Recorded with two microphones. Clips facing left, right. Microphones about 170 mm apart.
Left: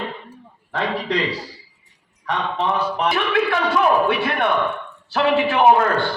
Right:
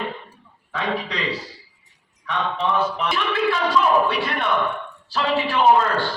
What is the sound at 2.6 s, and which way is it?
A man's voice, 60° left (ahead or behind).